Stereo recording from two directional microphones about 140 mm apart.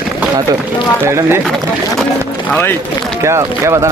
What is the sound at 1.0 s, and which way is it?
Speech, 20° right (ahead or behind).